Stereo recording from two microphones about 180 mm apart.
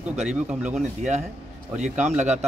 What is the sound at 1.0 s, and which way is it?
A man's voice, 40° right (ahead or behind).